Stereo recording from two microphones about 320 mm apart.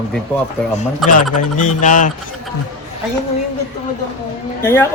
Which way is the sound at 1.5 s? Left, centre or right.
Left.